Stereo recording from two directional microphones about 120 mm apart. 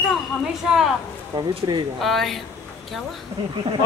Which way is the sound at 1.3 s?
40° right (ahead or behind).